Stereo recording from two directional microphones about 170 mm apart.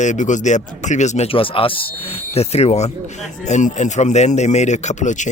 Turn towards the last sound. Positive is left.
turn(degrees=45)  # may be behind; listen again after turning